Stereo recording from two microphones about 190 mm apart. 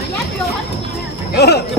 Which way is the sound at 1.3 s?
60° left (ahead or behind).